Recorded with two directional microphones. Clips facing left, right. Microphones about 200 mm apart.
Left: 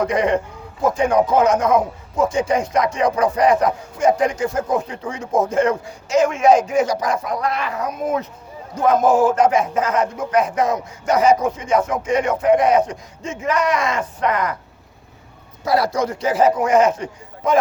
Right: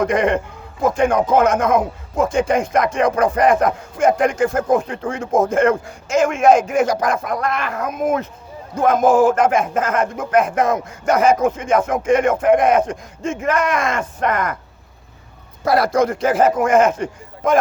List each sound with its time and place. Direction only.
0.0 s a man's voice: 50° right (ahead or behind)
15.6 s speech: 50° right (ahead or behind)